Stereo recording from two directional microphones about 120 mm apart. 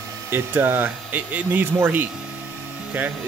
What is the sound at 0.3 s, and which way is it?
Speech, 20° right (ahead or behind).